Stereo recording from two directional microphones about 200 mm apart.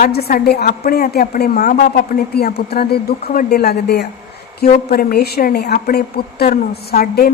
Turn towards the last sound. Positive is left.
turn(degrees=45)  # may be behind; listen again after turning